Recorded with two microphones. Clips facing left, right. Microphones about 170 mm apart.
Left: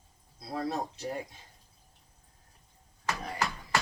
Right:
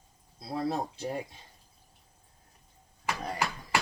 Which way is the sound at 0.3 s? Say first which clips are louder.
Right 2 dB; 30° right (ahead or behind).